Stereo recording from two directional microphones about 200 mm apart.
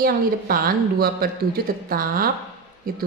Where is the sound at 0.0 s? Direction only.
45° right (ahead or behind).